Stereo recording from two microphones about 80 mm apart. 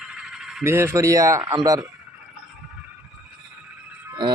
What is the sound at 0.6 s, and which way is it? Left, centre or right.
Speech, right.